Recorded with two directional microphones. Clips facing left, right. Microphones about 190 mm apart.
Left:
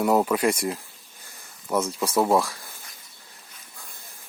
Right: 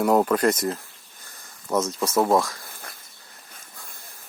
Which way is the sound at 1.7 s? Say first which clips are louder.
Right 1 dB; 10° left (ahead or behind).